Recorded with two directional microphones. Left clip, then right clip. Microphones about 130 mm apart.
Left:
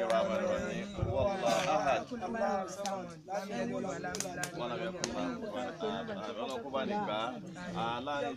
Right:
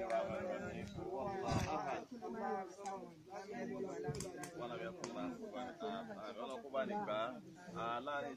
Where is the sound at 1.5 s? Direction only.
25° left (ahead or behind).